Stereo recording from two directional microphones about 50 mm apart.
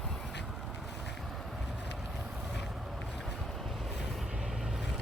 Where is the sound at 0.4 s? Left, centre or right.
Centre.